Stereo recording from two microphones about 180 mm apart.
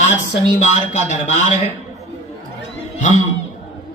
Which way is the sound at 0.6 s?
40° left (ahead or behind).